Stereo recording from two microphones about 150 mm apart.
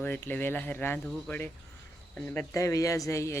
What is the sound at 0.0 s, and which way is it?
Speech, 10° left (ahead or behind).